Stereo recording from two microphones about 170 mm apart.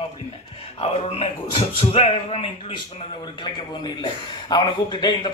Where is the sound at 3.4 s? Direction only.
25° left (ahead or behind).